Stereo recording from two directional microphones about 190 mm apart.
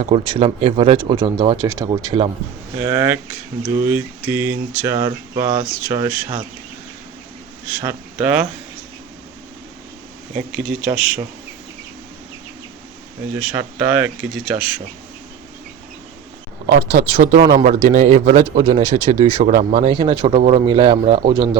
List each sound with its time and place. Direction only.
0.0 s speech: 30° right (ahead or behind)
2.7 s speech: 15° right (ahead or behind)
7.8 s speech: 10° right (ahead or behind)
10.3 s speech: 5° right (ahead or behind)
13.3 s speech: 10° right (ahead or behind)
16.9 s speech: 45° right (ahead or behind)
18.3 s speech: 30° right (ahead or behind)
19.9 s speech: 25° right (ahead or behind)